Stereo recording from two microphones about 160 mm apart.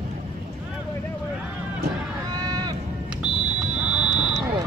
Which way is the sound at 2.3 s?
25° right (ahead or behind).